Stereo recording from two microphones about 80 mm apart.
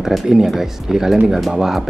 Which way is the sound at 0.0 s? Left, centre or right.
Centre.